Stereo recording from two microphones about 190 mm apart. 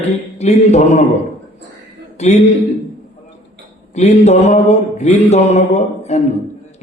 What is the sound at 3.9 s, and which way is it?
A man's voice, 35° left (ahead or behind).